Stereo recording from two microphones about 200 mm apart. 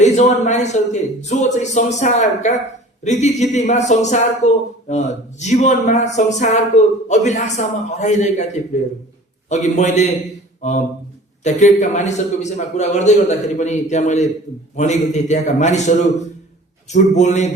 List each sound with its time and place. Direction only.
0.0 s a man's voice: 35° left (ahead or behind)
9.5 s speech: 35° left (ahead or behind)
11.4 s speech: 35° left (ahead or behind)